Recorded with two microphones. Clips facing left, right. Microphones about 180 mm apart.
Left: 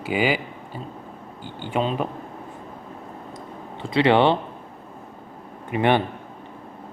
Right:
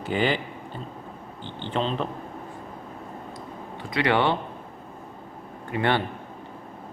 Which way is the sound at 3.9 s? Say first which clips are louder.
Left 5 dB; 25° left (ahead or behind).